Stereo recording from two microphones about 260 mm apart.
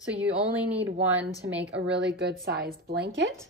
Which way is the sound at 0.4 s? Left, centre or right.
Centre.